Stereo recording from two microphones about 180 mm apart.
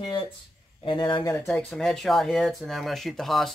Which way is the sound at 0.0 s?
25° left (ahead or behind).